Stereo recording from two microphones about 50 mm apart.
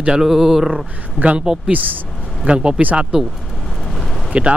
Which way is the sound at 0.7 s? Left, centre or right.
Right.